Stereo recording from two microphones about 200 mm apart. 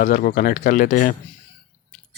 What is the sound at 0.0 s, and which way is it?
Speech, 45° left (ahead or behind).